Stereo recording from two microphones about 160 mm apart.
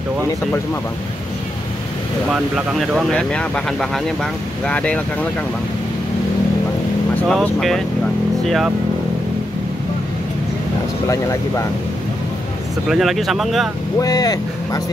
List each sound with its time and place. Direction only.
2.3 s speech: 5° right (ahead or behind)
7.2 s speech: centre (ahead or behind)
12.8 s speech: centre (ahead or behind)
13.9 s speech: 25° left (ahead or behind)